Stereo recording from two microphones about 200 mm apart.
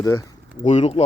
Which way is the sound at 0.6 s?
35° left (ahead or behind).